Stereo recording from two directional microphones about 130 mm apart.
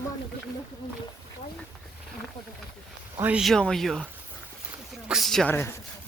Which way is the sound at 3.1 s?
15° right (ahead or behind).